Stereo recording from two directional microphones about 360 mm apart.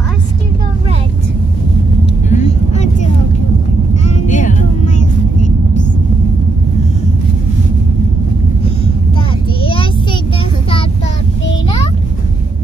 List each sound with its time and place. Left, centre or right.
2.2 s vehicle: centre
4.3 s vehicle: centre
9.6 s child singing: centre